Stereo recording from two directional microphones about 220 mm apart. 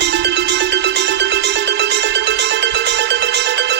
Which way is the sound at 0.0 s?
50° right (ahead or behind).